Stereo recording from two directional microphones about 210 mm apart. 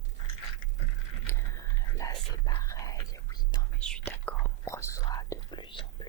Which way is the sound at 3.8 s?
5° left (ahead or behind).